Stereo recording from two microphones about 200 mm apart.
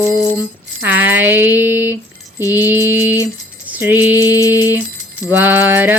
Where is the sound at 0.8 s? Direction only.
10° right (ahead or behind).